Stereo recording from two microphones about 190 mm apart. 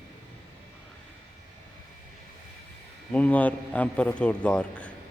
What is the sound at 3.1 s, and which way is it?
A man's voice, 5° left (ahead or behind).